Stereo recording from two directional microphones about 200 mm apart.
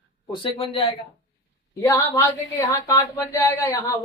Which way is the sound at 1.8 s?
15° left (ahead or behind).